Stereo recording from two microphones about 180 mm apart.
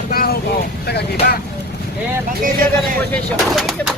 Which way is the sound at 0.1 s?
55° left (ahead or behind).